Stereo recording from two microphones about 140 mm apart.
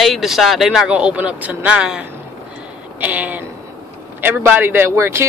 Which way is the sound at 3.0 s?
10° right (ahead or behind).